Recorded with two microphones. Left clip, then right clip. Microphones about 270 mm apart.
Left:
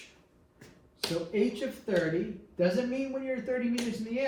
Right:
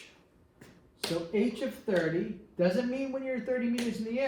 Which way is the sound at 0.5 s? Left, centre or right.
Centre.